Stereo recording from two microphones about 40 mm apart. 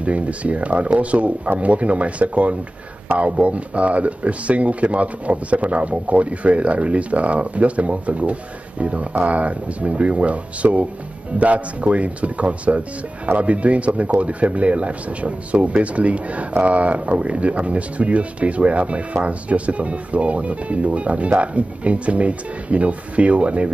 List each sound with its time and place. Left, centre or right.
0.0 s speech: right